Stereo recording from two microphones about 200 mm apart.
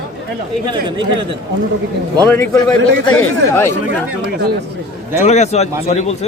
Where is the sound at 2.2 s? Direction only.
10° left (ahead or behind).